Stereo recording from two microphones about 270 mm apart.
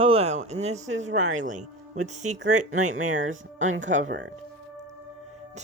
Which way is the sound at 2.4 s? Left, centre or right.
Right.